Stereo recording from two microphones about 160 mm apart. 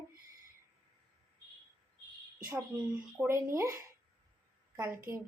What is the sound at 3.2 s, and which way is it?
A woman's voice, 15° right (ahead or behind).